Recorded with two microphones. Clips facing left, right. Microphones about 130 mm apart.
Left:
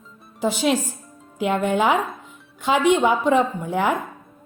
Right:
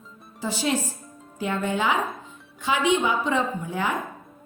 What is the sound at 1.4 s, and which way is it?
A woman's voice, 70° left (ahead or behind).